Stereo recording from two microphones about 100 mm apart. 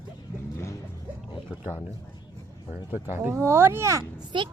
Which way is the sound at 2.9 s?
20° right (ahead or behind).